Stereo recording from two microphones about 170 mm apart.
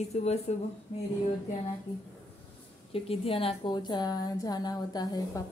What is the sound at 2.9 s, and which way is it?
A woman's voice, 35° left (ahead or behind).